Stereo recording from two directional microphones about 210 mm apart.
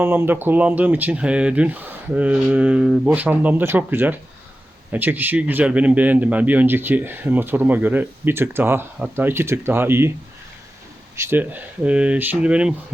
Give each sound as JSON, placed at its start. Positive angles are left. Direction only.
{"t": 0.0, "sound": "a man's voice", "side_deg": -10}
{"t": 11.2, "sound": "a man's voice", "side_deg": -10}